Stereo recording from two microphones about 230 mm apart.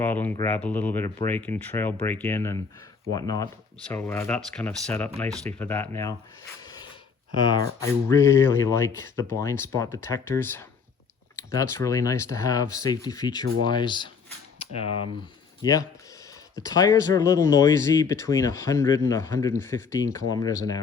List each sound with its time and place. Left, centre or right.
0.0 s speech: centre
7.8 s speech: centre
15.6 s speech: centre